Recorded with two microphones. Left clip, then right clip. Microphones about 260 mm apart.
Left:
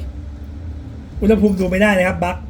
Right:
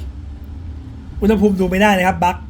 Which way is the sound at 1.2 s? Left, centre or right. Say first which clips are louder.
Even; right.